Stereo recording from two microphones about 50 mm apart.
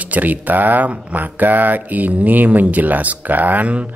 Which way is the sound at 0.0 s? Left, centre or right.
Right.